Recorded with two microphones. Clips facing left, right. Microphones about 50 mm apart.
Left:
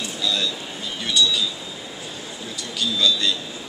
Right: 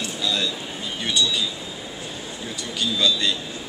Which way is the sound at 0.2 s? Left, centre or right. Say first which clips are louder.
Left 1 dB; centre.